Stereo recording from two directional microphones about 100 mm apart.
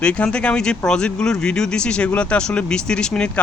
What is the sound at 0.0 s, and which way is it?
Speech, 10° left (ahead or behind).